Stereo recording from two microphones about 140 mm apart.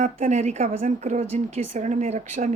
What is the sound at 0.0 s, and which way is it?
A woman's voice, 55° right (ahead or behind).